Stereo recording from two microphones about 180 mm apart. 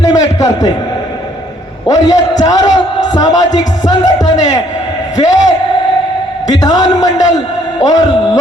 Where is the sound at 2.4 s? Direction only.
20° left (ahead or behind).